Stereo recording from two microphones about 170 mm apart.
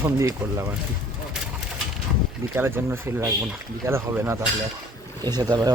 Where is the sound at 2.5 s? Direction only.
15° right (ahead or behind).